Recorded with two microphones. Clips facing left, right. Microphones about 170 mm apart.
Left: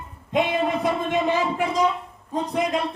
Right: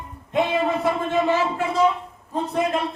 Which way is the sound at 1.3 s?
15° left (ahead or behind).